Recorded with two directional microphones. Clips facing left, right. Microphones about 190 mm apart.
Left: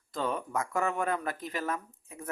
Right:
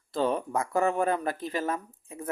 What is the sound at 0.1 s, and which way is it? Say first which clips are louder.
Speech: right 5 dB; 30° right (ahead or behind).